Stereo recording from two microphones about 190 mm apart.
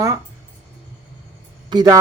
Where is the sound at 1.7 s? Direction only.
20° right (ahead or behind).